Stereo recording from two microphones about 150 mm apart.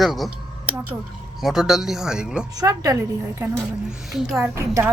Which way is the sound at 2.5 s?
25° right (ahead or behind).